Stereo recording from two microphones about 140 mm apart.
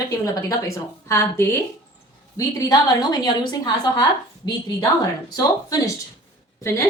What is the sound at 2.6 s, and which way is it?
A woman's voice, 25° left (ahead or behind).